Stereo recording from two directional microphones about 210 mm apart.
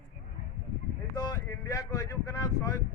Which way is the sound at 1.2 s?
15° left (ahead or behind).